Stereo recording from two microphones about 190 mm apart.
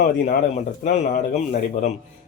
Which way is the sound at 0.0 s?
40° left (ahead or behind).